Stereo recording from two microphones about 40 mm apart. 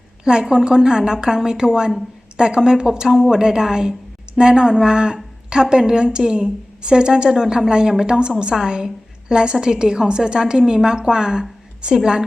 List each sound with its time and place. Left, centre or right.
0.3 s a woman's voice: centre